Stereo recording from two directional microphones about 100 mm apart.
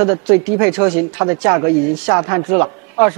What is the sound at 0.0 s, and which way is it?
A man's voice, 20° right (ahead or behind).